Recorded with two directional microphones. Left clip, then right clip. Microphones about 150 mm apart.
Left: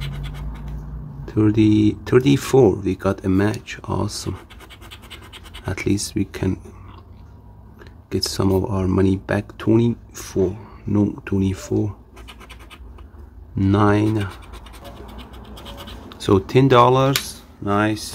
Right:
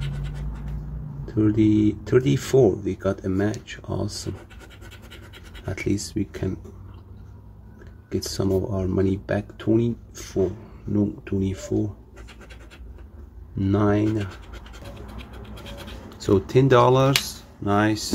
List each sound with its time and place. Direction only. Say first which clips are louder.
1.2 s speech: left 3 dB; 30° left (ahead or behind)
5.5 s speech: left 4 dB; 25° left (ahead or behind)
8.1 s speech: left 4 dB; 30° left (ahead or behind)
13.6 s speech: left 4 dB; 30° left (ahead or behind)
16.2 s speech: left 3 dB; 25° left (ahead or behind); by 18.1 s 5° left (ahead or behind)